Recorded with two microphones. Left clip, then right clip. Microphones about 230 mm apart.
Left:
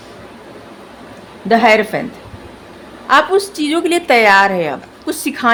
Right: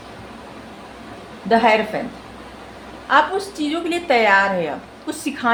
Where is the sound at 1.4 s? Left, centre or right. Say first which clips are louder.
Left 5 dB; left.